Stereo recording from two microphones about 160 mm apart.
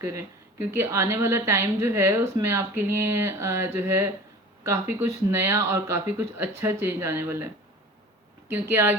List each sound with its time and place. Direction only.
0.0 s a woman's voice: 15° right (ahead or behind)
8.7 s a woman's voice: 15° right (ahead or behind)